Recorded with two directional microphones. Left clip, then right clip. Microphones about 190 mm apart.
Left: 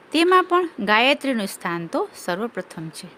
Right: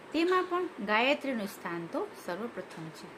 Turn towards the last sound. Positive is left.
turn(degrees=60)  # may be behind; listen again after turning